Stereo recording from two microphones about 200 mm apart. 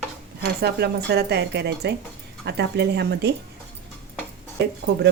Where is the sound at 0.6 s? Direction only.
55° right (ahead or behind).